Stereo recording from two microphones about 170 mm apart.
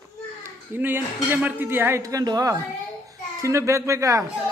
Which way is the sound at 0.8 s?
10° right (ahead or behind).